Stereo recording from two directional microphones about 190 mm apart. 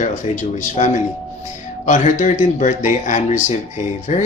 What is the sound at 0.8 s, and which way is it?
Speech, 35° left (ahead or behind).